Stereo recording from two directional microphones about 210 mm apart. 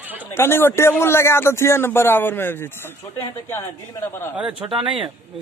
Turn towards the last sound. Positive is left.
turn(degrees=-25)  # may be behind; listen again after turning